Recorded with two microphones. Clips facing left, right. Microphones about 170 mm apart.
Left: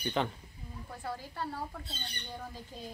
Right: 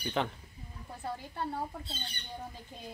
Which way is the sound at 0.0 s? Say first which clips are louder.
Left 1 dB; centre (ahead or behind).